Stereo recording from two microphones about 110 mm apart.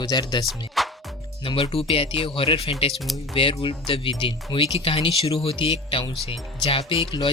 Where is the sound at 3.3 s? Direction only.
50° left (ahead or behind).